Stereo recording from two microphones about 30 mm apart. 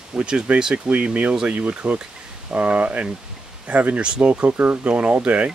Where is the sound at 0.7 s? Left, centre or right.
Right.